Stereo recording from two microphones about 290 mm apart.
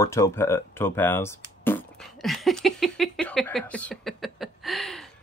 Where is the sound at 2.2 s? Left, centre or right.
Centre.